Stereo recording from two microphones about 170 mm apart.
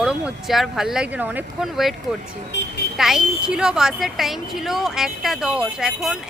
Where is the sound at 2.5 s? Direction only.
90° left.